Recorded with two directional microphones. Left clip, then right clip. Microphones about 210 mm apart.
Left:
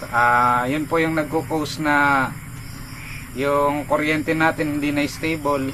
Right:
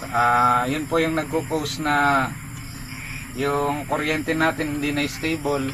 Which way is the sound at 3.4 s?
20° left (ahead or behind).